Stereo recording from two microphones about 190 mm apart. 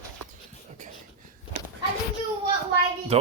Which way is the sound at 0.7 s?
40° right (ahead or behind).